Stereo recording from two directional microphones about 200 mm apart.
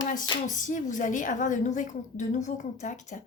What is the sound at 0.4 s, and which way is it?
Speech, 40° left (ahead or behind).